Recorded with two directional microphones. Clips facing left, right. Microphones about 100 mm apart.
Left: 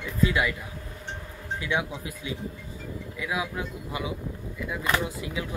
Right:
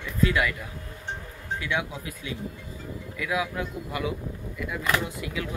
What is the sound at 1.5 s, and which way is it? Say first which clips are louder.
Speech: left 1 dB; 20° left (ahead or behind).